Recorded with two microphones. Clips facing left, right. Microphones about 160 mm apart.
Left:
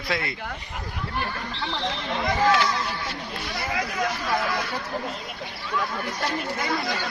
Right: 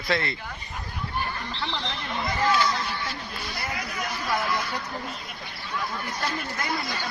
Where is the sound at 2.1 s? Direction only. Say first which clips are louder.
Left 3 dB; 90° left.